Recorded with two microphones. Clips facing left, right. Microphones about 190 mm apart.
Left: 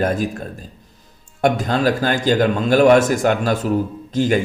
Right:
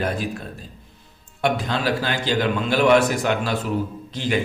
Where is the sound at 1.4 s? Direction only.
45° left (ahead or behind).